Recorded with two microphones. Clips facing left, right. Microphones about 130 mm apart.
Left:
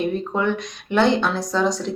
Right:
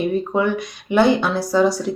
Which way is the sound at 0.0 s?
5° right (ahead or behind).